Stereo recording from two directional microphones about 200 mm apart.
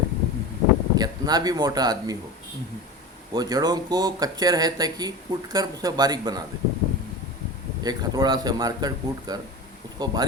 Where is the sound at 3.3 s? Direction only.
20° right (ahead or behind).